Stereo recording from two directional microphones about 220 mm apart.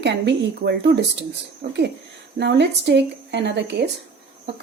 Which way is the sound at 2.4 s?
50° right (ahead or behind).